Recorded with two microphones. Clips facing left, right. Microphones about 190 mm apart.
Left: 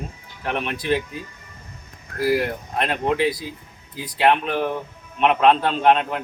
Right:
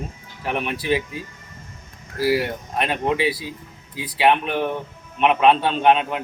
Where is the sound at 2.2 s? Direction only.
5° right (ahead or behind).